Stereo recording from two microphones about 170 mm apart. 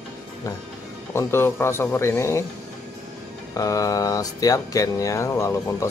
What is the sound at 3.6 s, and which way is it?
Speech, 20° left (ahead or behind).